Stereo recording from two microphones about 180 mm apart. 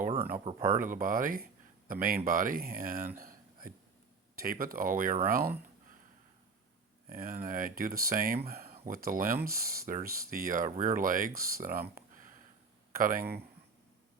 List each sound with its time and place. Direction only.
0.2 s speech: 55° right (ahead or behind)
3.2 s a sound: 50° right (ahead or behind)
4.4 s speech: 50° right (ahead or behind)
7.1 s speech: 55° right (ahead or behind)
8.4 s a sound: 55° right (ahead or behind)
8.9 s speech: 55° right (ahead or behind)